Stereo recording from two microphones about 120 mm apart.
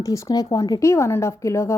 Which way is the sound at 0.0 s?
25° left (ahead or behind).